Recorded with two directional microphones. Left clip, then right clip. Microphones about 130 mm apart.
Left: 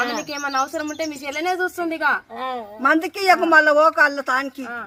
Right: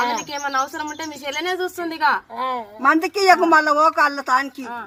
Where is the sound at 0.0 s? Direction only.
20° left (ahead or behind).